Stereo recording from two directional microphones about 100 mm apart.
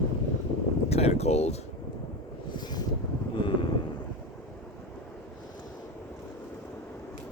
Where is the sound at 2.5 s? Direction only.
45° left (ahead or behind).